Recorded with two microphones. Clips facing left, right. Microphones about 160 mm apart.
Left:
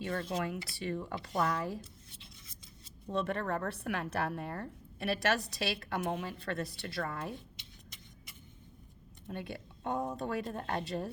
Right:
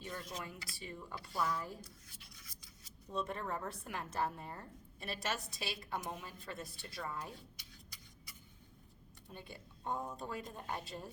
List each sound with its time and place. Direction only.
0.0 s speech: 75° left (ahead or behind)
1.8 s rub: 25° left (ahead or behind)
3.1 s a woman's voice: 75° left (ahead or behind); by 7.3 s 90° left
7.5 s vehicle: 25° left (ahead or behind)
9.3 s a woman's voice: 80° left